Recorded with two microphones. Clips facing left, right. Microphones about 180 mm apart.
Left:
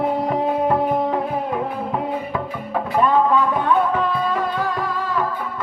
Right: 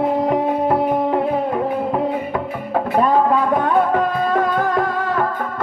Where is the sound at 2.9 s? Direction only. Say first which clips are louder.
Right 1 dB; 40° right (ahead or behind).